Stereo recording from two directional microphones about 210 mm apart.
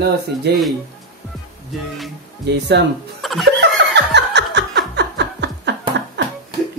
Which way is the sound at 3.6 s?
55° right (ahead or behind).